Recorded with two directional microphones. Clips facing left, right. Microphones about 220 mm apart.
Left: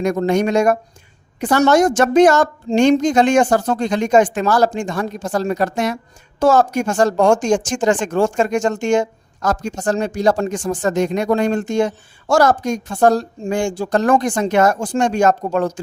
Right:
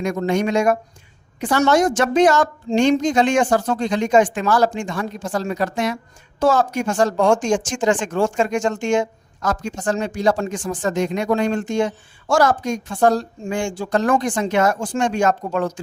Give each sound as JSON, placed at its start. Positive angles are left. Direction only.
{"t": 0.0, "sound": "a woman's voice", "side_deg": 40}